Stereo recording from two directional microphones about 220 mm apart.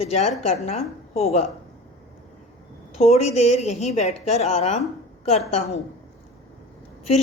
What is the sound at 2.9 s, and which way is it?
A woman's voice, 30° left (ahead or behind).